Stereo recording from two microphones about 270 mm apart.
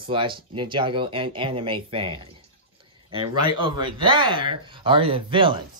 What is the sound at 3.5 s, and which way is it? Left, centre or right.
Speech, centre.